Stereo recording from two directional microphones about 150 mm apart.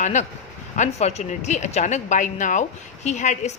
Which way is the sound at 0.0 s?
50° left (ahead or behind).